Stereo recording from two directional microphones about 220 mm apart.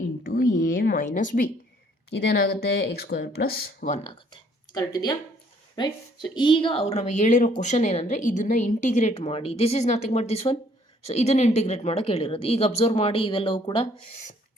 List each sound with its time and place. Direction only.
0.2 s a sound: 40° left (ahead or behind)
2.4 s speech: 45° left (ahead or behind)
3.8 s a woman's voice: 30° left (ahead or behind)